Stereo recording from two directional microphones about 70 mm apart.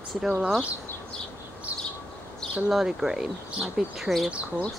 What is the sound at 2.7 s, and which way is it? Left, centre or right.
Speech, centre.